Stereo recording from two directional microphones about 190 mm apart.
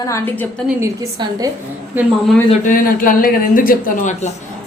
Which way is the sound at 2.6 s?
45° left (ahead or behind).